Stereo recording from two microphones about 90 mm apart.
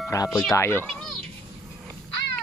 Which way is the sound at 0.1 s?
40° left (ahead or behind).